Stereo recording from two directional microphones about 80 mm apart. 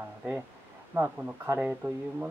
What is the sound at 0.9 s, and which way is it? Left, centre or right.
Speech, right.